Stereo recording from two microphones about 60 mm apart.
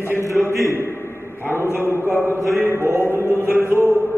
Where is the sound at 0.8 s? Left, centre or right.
Left.